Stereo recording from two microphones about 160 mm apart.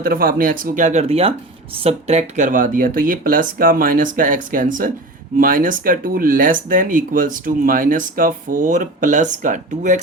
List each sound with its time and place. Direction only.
0.0 s speech: 65° right (ahead or behind)